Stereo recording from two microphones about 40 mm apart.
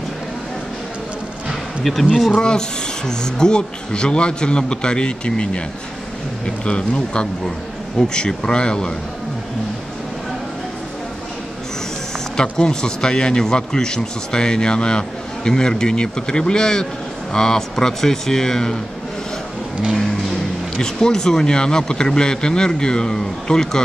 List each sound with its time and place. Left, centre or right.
1.9 s speech: centre
2.3 s speech: left
12.4 s speech: centre
20.7 s speech: centre